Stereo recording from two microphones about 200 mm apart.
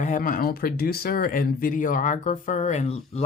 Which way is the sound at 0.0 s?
40° left (ahead or behind).